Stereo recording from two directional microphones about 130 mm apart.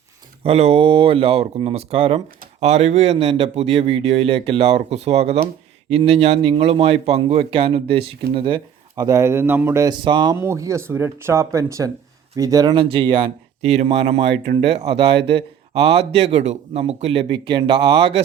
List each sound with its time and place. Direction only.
0.4 s speech: 50° right (ahead or behind)
2.6 s speech: 55° right (ahead or behind); by 9.0 s 40° right (ahead or behind)
9.0 s speech: 20° right (ahead or behind)
9.9 s speech: 35° right (ahead or behind)
10.3 s speech: 20° right (ahead or behind)
12.7 s speech: 40° right (ahead or behind)
13.6 s speech: 55° right (ahead or behind)